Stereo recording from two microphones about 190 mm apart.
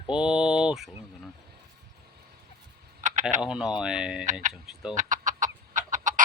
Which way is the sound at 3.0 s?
40° right (ahead or behind).